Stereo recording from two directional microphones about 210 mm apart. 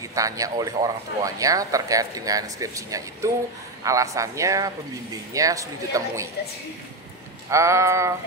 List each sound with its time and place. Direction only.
0.1 s speech: 15° right (ahead or behind)
7.5 s speech: 15° right (ahead or behind)